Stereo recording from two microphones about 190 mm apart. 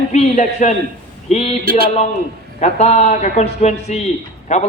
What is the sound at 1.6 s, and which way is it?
Speech, 50° right (ahead or behind).